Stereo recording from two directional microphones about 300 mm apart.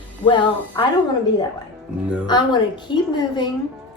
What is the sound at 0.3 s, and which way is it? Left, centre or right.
Speech, centre.